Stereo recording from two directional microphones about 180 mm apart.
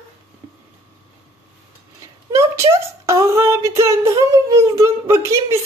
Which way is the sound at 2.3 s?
15° right (ahead or behind).